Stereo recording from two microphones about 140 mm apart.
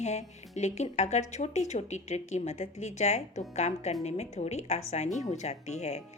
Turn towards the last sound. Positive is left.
turn(degrees=50)  # may be behind; listen again after turning